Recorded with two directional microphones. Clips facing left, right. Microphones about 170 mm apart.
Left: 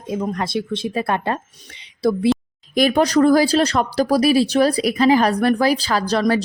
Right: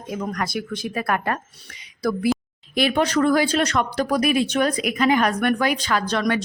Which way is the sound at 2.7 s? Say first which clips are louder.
Left 4 dB; 40° left (ahead or behind).